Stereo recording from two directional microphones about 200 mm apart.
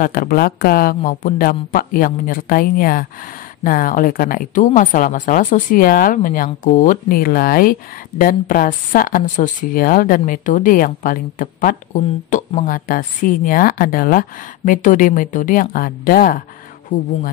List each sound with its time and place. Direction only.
0.0 s speech: 45° left (ahead or behind)